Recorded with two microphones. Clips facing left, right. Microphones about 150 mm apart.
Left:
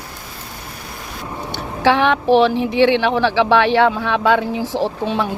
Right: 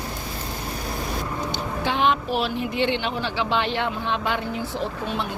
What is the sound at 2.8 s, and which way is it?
Speech, 85° left.